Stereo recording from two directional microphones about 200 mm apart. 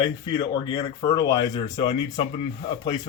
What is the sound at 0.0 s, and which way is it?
Speech, 20° left (ahead or behind).